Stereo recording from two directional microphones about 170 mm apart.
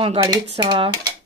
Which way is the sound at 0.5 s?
35° right (ahead or behind).